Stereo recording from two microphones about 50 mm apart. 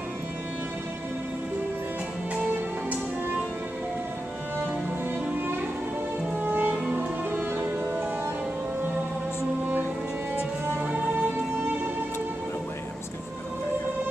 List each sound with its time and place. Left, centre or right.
6.4 s music: right
6.7 s music: right
7.3 s music: right